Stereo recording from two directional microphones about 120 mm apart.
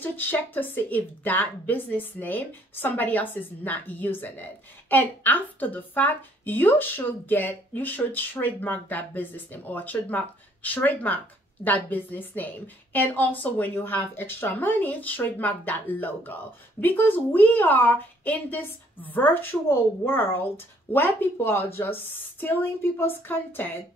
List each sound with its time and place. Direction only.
0.0 s a woman's voice: 15° left (ahead or behind)